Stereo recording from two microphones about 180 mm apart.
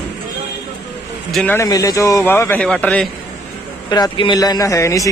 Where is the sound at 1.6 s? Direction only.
20° left (ahead or behind).